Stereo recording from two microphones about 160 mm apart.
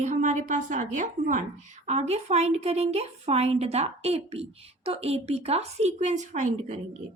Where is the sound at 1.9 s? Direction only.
40° right (ahead or behind).